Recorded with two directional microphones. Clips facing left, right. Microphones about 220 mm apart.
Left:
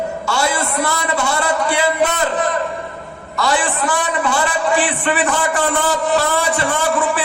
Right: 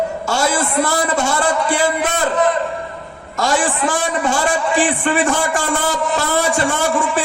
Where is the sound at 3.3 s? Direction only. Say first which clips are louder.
Right 1 dB; 45° right (ahead or behind).